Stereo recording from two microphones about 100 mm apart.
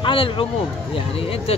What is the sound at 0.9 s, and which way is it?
Speech, 70° left (ahead or behind).